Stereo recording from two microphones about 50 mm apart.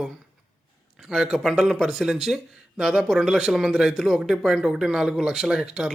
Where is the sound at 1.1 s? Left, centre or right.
Centre.